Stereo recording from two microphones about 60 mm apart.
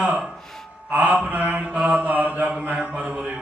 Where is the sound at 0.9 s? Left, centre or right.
Right.